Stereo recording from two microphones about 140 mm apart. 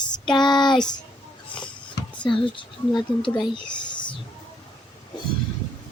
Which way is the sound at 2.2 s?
35° left (ahead or behind).